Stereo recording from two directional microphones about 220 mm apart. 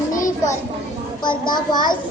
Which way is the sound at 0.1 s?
35° left (ahead or behind).